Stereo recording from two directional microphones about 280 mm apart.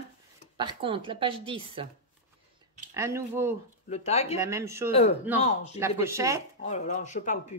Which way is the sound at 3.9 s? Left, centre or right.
Left.